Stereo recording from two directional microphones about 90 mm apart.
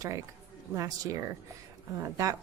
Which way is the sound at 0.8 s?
40° right (ahead or behind).